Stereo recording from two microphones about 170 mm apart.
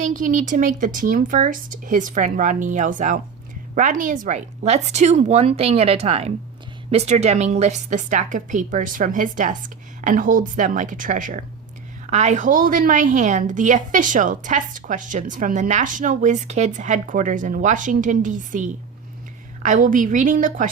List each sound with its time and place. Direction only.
0.0 s a woman's voice: 50° right (ahead or behind)